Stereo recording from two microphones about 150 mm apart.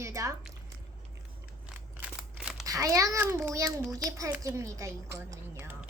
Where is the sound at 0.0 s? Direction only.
20° right (ahead or behind).